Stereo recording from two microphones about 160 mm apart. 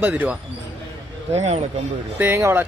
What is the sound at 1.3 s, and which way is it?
Speech, 45° right (ahead or behind).